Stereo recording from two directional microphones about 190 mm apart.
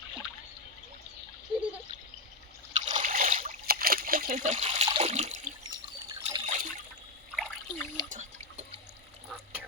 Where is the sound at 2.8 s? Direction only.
40° right (ahead or behind).